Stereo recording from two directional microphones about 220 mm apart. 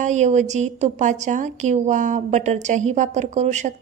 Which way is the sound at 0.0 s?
35° right (ahead or behind).